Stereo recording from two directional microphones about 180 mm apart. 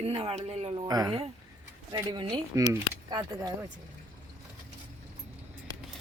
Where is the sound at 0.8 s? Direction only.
20° right (ahead or behind).